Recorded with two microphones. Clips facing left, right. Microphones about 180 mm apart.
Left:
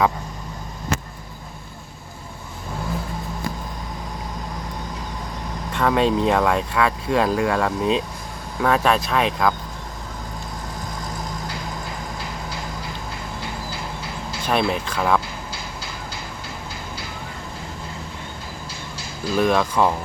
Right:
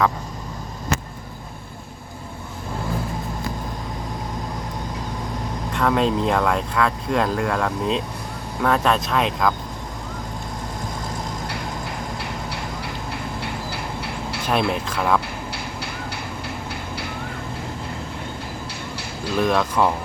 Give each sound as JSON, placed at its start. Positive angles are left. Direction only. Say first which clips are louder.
{"t": 5.7, "sound": "speech", "louder": "left 1 dB", "side_deg": 0}
{"t": 12.2, "sound": "train", "louder": "right 1 dB", "side_deg": -65}
{"t": 13.4, "sound": "a sound", "louder": "right 2 dB", "side_deg": -65}
{"t": 14.4, "sound": "speech", "louder": "left 1 dB", "side_deg": 0}
{"t": 15.5, "sound": "a sound", "louder": "right 3 dB", "side_deg": -65}
{"t": 19.3, "sound": "speech", "louder": "left 1 dB", "side_deg": 0}